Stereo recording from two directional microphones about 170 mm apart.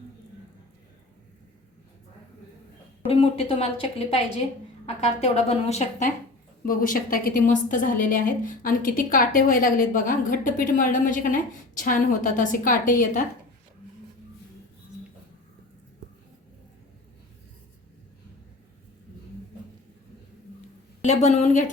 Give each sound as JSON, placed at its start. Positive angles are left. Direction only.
{"t": 3.1, "sound": "speech", "side_deg": 35}
{"t": 6.7, "sound": "a woman's voice", "side_deg": 55}
{"t": 21.0, "sound": "a woman's voice", "side_deg": 40}